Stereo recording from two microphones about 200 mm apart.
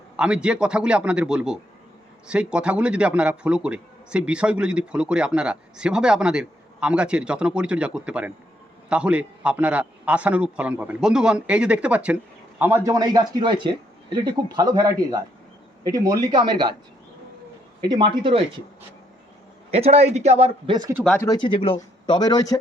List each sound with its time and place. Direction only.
0.2 s a man's voice: 5° right (ahead or behind); by 16.7 s 20° right (ahead or behind)
17.8 s a man's voice: 20° right (ahead or behind)
19.7 s a man's voice: 30° right (ahead or behind)
21.2 s speech: 20° left (ahead or behind)